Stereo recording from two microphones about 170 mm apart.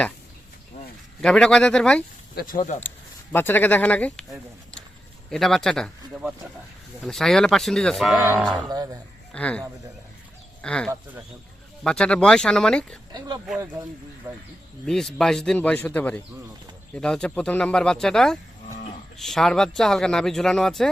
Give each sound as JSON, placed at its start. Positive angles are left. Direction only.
{"t": 1.2, "sound": "speech", "side_deg": 5}
{"t": 2.3, "sound": "speech", "side_deg": 55}
{"t": 3.3, "sound": "speech", "side_deg": 10}
{"t": 7.0, "sound": "speech", "side_deg": 5}
{"t": 8.7, "sound": "a man's voice", "side_deg": -20}
{"t": 9.3, "sound": "speech", "side_deg": 5}
{"t": 13.1, "sound": "a man's voice", "side_deg": -25}
{"t": 14.8, "sound": "speech", "side_deg": 5}